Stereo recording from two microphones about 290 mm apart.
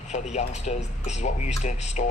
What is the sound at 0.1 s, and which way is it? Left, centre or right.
Speech, left.